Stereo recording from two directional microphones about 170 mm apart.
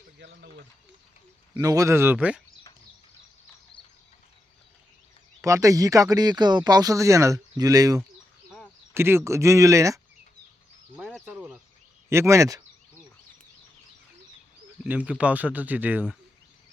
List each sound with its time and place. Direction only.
0.2 s speech: 90° right
1.5 s speech: 20° right (ahead or behind)
5.4 s speech: 20° right (ahead or behind)
10.9 s a sound: 5° right (ahead or behind)
12.0 s speech: 15° right (ahead or behind)
14.8 s speech: 10° right (ahead or behind)